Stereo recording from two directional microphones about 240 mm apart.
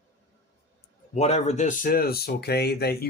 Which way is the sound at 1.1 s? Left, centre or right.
Left.